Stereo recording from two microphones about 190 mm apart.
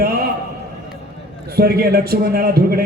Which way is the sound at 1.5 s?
55° right (ahead or behind).